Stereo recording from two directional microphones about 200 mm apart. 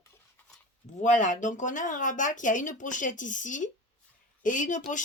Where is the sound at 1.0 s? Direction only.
40° left (ahead or behind).